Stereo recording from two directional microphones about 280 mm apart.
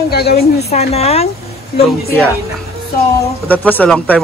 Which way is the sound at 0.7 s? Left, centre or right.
Left.